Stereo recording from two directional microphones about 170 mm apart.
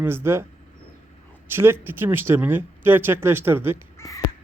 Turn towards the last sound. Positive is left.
turn(degrees=20)  # may be behind; listen again after turning